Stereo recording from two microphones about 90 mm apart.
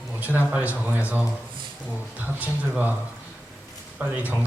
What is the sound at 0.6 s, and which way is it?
Speech, 15° right (ahead or behind).